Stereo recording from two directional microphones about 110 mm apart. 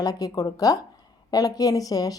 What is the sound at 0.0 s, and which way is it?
A woman's voice, 35° left (ahead or behind).